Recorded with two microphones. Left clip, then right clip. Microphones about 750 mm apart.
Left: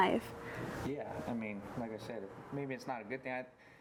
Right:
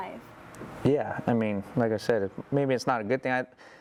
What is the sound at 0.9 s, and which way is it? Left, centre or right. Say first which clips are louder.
Speech: right 19 dB; right.